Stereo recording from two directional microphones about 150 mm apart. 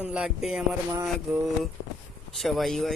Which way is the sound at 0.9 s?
15° right (ahead or behind).